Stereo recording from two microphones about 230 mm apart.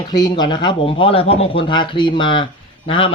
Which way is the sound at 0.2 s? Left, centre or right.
Centre.